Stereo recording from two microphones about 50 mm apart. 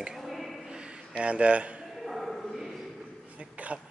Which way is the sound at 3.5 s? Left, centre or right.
Right.